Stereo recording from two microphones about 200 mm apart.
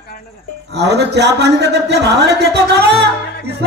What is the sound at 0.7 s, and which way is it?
Speech, 60° right (ahead or behind).